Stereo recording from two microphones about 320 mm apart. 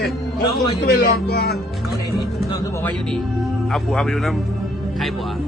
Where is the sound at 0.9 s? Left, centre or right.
Left.